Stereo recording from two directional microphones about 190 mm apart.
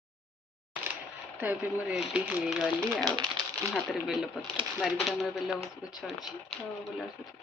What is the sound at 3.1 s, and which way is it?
Speech, 20° right (ahead or behind).